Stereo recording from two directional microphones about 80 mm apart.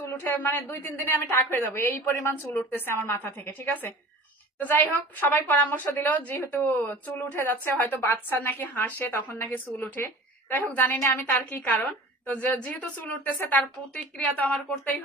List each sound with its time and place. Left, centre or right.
0.2 s a woman's voice: left
13.6 s a woman's voice: centre